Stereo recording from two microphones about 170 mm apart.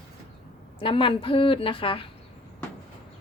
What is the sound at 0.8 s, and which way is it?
A woman's voice, 30° left (ahead or behind).